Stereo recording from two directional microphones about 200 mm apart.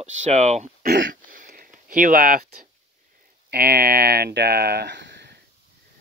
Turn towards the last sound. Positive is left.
turn(degrees=-60)  # may be behind; listen again after turning